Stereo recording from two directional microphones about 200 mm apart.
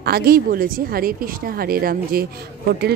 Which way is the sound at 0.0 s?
50° right (ahead or behind).